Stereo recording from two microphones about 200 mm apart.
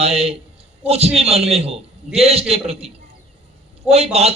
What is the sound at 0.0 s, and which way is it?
A man's voice, 30° right (ahead or behind).